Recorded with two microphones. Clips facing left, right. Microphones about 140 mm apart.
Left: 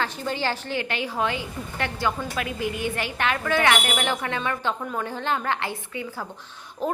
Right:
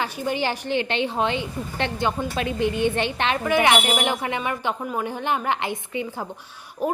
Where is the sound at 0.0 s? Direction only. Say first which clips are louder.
Right 2 dB; 15° right (ahead or behind).